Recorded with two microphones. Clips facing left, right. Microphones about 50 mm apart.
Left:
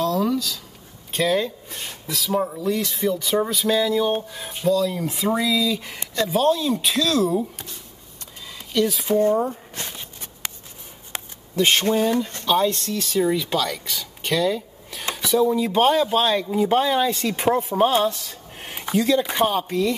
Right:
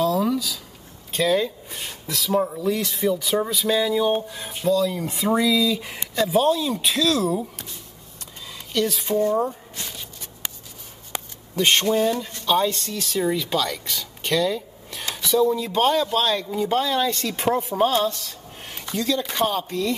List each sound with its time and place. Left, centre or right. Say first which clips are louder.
0.0 s a sound: even; centre
1.1 s speech: even; centre
8.7 s speech: left 2 dB; centre
11.5 s speech: even; centre
17.7 s speech: left 2 dB; centre